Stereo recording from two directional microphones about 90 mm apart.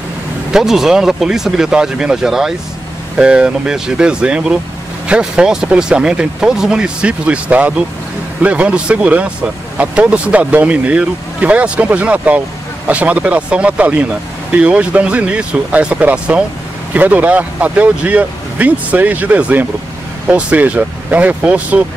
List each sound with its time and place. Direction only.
0.5 s speech: 5° right (ahead or behind)